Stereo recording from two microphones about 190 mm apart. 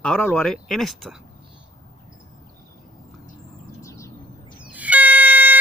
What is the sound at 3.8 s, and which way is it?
Bird, 15° left (ahead or behind).